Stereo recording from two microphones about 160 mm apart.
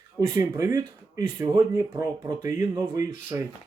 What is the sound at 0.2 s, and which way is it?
Speech, 20° right (ahead or behind).